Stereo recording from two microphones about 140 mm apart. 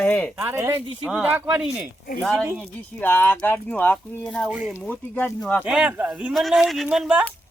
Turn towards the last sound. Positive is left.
turn(degrees=-5)  # may be behind; listen again after turning